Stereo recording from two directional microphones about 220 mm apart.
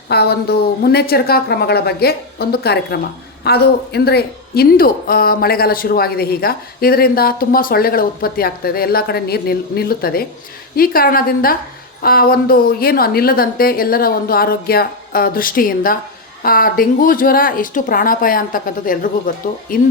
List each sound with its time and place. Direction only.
0.1 s a woman's voice: 45° left (ahead or behind)